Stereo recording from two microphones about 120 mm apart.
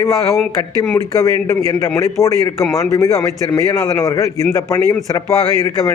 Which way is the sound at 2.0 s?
25° left (ahead or behind).